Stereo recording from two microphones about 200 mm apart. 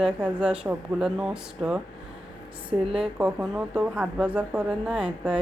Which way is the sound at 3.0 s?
5° right (ahead or behind).